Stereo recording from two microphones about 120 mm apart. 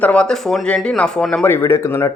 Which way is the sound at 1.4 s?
20° left (ahead or behind).